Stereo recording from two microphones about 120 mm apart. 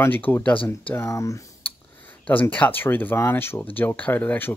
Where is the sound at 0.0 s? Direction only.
15° left (ahead or behind).